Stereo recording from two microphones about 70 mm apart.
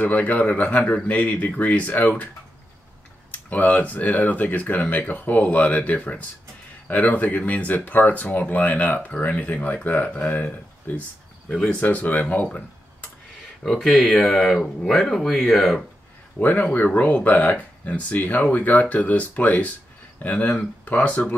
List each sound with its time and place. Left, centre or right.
0.0 s speech: left
3.3 s speech: left
11.8 s speech: left
13.7 s speech: centre
16.3 s speech: left